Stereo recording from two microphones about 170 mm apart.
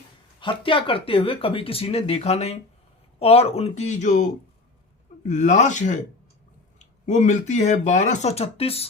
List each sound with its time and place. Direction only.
0.3 s speech: 30° left (ahead or behind)